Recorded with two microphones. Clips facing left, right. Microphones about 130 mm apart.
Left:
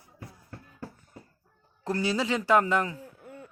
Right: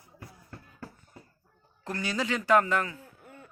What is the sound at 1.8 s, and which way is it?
Speech, 30° left (ahead or behind).